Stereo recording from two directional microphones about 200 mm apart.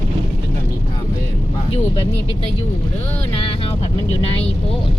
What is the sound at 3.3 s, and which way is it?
Speech, 25° left (ahead or behind).